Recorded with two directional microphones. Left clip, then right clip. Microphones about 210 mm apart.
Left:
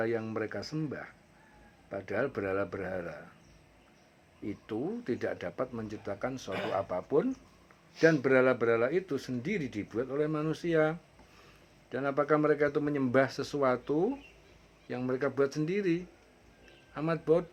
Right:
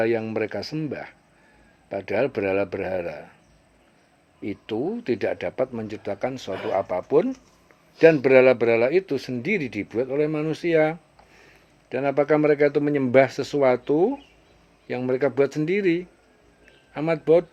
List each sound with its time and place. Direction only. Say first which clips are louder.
0.0 s speech: right 9 dB; 30° right (ahead or behind)
2.0 s speech: right 9 dB; 30° right (ahead or behind)
4.4 s speech: right 9 dB; 30° right (ahead or behind)